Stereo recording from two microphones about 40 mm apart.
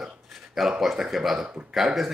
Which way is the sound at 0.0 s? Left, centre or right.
Centre.